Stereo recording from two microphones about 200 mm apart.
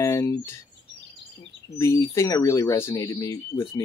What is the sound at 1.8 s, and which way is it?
Speech, 15° left (ahead or behind).